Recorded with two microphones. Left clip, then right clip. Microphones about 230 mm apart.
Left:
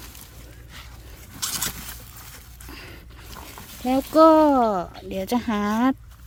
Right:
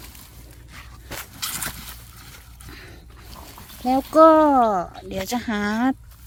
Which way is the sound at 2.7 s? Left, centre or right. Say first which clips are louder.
Left 2 dB; centre.